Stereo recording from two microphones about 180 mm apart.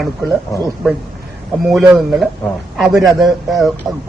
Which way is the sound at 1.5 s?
Centre (ahead or behind).